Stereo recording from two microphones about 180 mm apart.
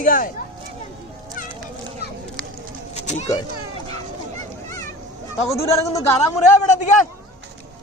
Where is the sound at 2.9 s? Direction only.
40° left (ahead or behind).